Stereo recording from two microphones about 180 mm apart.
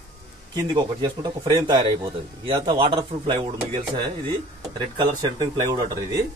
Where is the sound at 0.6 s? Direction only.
25° right (ahead or behind).